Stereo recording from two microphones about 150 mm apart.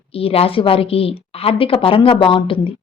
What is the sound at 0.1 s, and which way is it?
Speech, 40° left (ahead or behind).